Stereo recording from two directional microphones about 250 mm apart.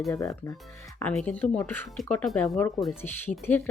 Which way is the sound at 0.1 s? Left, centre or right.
Centre.